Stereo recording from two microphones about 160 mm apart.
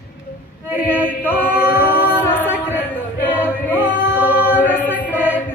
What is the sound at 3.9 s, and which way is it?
Singing, 10° right (ahead or behind).